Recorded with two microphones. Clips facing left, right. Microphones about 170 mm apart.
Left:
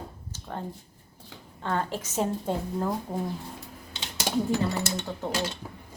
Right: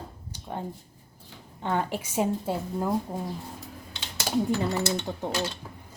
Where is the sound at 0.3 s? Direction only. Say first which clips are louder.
Right 1 dB; 15° right (ahead or behind).